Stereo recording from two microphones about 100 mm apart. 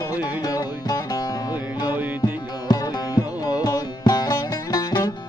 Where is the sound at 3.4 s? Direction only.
45° left (ahead or behind).